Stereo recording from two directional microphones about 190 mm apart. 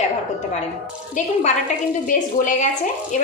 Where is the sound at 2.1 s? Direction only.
40° left (ahead or behind).